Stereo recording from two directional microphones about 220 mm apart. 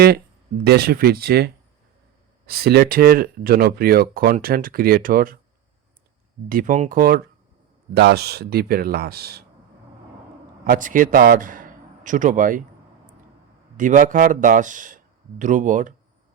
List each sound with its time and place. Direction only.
0.6 s speech: 45° right (ahead or behind)
2.5 s speech: 45° right (ahead or behind)
6.5 s speech: 40° right (ahead or behind)
10.6 s a man's voice: 40° right (ahead or behind)
13.7 s speech: 35° right (ahead or behind)